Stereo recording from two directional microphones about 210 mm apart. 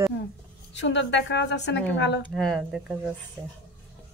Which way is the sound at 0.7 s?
60° left (ahead or behind).